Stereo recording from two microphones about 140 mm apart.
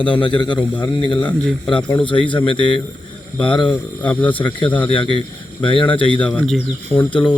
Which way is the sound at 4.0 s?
10° left (ahead or behind).